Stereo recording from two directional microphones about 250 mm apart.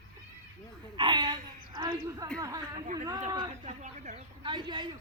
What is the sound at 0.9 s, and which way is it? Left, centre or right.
Speech, centre.